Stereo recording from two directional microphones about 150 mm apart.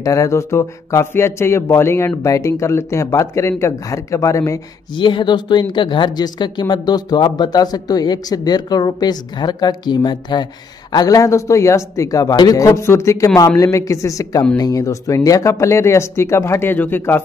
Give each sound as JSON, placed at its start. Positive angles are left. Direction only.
{"t": 0.0, "sound": "a woman's voice", "side_deg": 20}
{"t": 5.0, "sound": "a woman's voice", "side_deg": 30}